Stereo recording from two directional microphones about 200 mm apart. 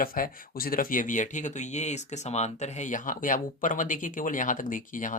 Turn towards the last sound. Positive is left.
turn(degrees=40)  # may be behind; listen again after turning